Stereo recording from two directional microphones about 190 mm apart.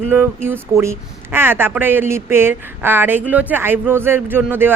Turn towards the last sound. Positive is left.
turn(degrees=-10)  # may be behind; listen again after turning